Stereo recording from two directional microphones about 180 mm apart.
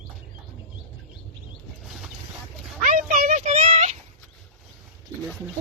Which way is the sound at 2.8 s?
45° right (ahead or behind).